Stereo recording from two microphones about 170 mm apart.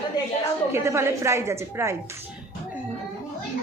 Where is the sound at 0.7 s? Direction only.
15° right (ahead or behind).